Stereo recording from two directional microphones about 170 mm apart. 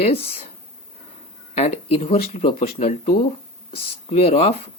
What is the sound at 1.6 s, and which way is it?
Speech, 35° left (ahead or behind).